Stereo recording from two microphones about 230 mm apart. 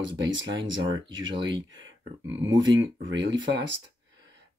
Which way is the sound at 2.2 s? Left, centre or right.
Centre.